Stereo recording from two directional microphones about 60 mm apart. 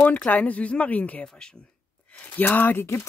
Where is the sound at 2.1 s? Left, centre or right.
Left.